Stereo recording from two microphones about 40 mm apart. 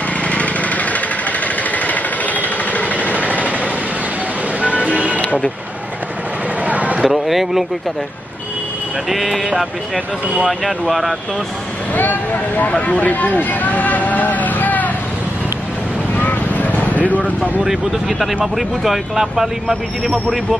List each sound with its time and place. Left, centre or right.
0.3 s a sound: left
1.9 s vehicle: left
4.6 s music: right
6.6 s a sound: right
7.0 s speech: centre
9.1 s speech: centre
10.6 s speech: centre
11.9 s speech: left
12.7 s speech: left
16.2 s vehicle: left
17.6 s speech: centre